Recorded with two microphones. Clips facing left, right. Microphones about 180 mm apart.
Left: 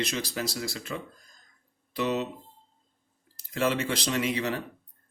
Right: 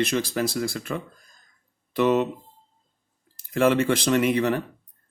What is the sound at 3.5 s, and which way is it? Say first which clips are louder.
Speech: right 7 dB; 55° right (ahead or behind).